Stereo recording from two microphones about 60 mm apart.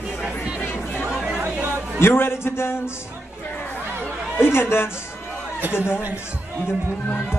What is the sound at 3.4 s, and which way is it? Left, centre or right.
Chatter, left.